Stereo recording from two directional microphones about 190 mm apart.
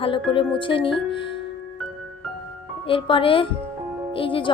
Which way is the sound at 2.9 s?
30° left (ahead or behind).